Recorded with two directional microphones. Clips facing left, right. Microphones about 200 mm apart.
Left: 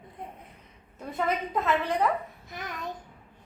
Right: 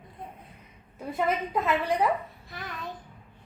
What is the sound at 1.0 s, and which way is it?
A woman's voice, 10° right (ahead or behind).